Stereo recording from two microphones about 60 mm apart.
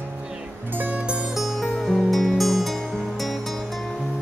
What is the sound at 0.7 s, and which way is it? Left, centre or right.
Music, right.